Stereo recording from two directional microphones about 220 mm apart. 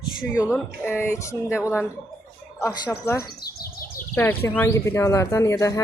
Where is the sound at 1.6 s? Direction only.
5° right (ahead or behind).